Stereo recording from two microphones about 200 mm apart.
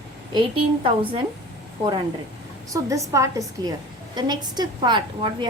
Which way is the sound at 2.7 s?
15° right (ahead or behind).